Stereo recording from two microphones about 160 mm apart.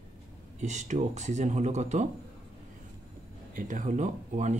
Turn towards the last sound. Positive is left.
turn(degrees=-50)  # may be behind; listen again after turning